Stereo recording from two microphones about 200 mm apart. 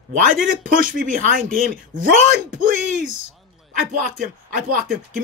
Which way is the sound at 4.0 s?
45° right (ahead or behind).